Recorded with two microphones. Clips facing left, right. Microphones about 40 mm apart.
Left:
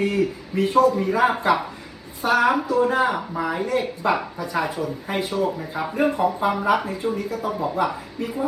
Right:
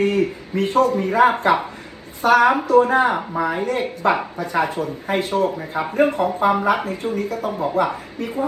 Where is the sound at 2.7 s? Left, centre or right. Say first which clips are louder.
Right 5 dB; right.